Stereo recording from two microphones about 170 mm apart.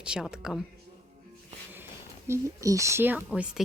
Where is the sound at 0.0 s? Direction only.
5° right (ahead or behind).